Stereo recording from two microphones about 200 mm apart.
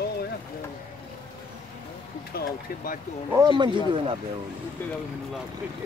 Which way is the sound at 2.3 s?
45° left (ahead or behind).